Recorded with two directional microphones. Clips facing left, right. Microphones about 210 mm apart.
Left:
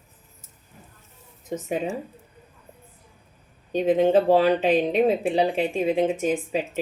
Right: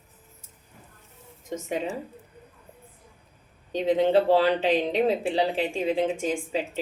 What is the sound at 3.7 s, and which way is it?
A woman's voice, 15° left (ahead or behind).